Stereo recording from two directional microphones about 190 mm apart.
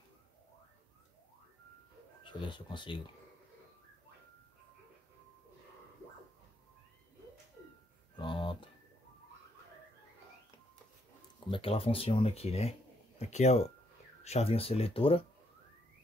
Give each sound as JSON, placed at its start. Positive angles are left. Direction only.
{"t": 2.2, "sound": "speech", "side_deg": 25}
{"t": 8.2, "sound": "a sound", "side_deg": 25}
{"t": 11.3, "sound": "speech", "side_deg": 30}